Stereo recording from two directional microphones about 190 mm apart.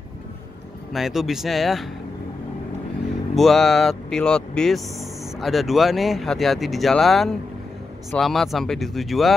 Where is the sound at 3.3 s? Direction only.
Centre (ahead or behind).